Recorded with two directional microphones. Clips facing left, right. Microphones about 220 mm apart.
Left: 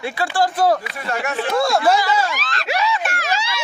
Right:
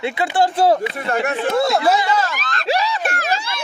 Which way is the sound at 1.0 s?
55° right (ahead or behind).